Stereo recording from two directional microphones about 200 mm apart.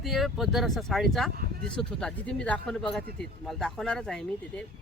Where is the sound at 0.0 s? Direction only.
Centre (ahead or behind).